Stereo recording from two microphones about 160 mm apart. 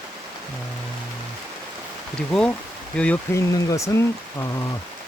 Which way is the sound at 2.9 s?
10° left (ahead or behind).